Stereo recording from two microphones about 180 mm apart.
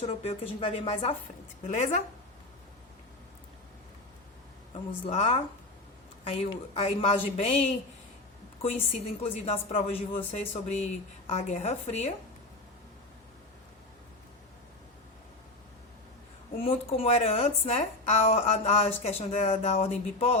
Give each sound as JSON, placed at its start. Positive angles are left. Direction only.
{"t": 0.0, "sound": "a woman's voice", "side_deg": 35}
{"t": 5.0, "sound": "a woman's voice", "side_deg": 35}
{"t": 16.6, "sound": "a woman's voice", "side_deg": 30}